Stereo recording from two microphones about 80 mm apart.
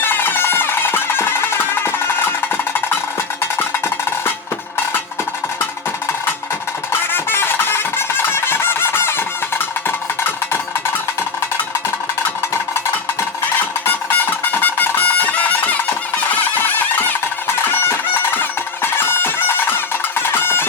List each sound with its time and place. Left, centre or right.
0.0 s music: left
6.9 s music: left
13.8 s music: left